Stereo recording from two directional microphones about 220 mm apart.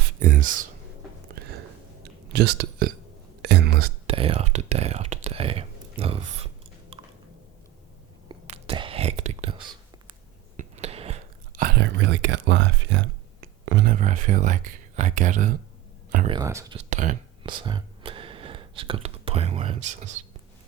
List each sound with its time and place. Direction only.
0.2 s speech: 35° right (ahead or behind)
2.3 s speech: 50° right (ahead or behind)
4.0 s speech: 25° right (ahead or behind)
8.3 s whispering: 25° right (ahead or behind)
10.6 s a sound: 30° right (ahead or behind)
11.8 s speech: 55° right (ahead or behind)
13.8 s speech: 35° right (ahead or behind)
16.2 s speech: 20° right (ahead or behind)
16.7 s speech: 35° right (ahead or behind)
17.4 s speech: 20° right (ahead or behind)